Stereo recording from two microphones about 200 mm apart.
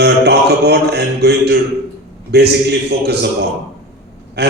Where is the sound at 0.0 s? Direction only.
55° right (ahead or behind).